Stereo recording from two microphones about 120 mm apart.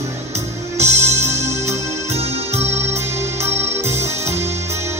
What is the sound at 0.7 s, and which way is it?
Music, 65° right (ahead or behind).